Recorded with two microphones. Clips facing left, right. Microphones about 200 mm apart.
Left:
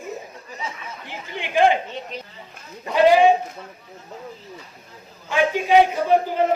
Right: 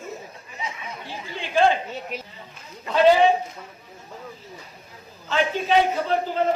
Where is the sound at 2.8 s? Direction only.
15° left (ahead or behind).